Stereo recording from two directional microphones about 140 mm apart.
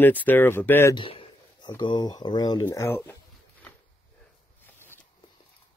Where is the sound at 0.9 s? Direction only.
40° left (ahead or behind); by 3.1 s 15° left (ahead or behind).